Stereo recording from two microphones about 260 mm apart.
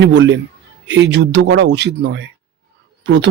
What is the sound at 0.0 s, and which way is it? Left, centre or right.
A man's voice, right.